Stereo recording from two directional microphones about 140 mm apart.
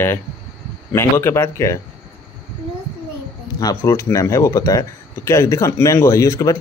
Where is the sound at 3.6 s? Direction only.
20° left (ahead or behind).